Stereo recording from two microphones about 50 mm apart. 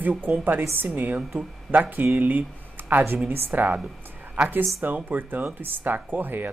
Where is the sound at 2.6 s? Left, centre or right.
Right.